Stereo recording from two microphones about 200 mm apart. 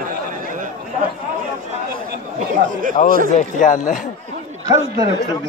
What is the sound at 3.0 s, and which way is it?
Speech, 35° left (ahead or behind).